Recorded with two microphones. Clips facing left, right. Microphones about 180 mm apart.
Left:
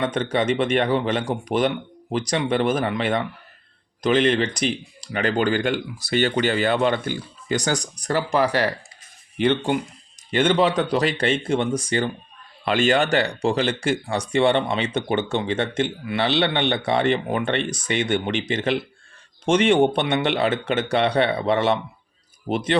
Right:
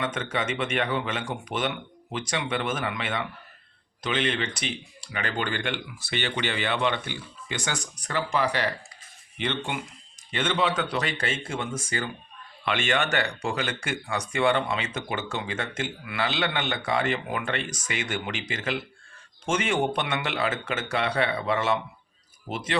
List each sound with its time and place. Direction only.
0.0 s speech: 35° left (ahead or behind)